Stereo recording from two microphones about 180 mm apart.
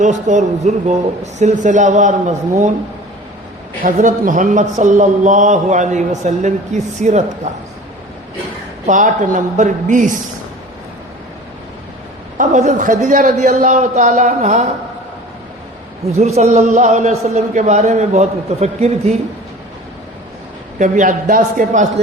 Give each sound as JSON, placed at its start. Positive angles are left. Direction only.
{"t": 0.0, "sound": "a man's voice", "side_deg": -40}
{"t": 3.8, "sound": "a man's voice", "side_deg": -45}
{"t": 8.9, "sound": "a man's voice", "side_deg": -45}
{"t": 12.4, "sound": "a man's voice", "side_deg": -45}
{"t": 16.1, "sound": "a man's voice", "side_deg": -40}
{"t": 20.7, "sound": "a man's voice", "side_deg": -45}